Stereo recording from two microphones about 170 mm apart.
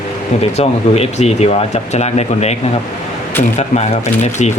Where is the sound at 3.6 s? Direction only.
40° left (ahead or behind).